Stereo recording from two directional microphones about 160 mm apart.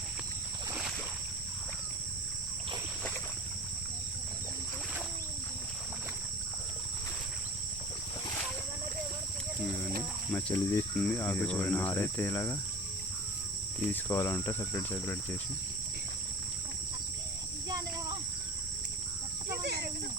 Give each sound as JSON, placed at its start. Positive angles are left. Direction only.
{"t": 10.3, "sound": "speech", "side_deg": 15}
{"t": 11.0, "sound": "cricket", "side_deg": 10}
{"t": 13.7, "sound": "cricket", "side_deg": 15}
{"t": 19.6, "sound": "a sound", "side_deg": -90}